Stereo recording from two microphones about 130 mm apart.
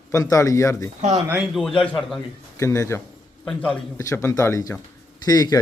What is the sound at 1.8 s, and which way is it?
Speech, 5° left (ahead or behind).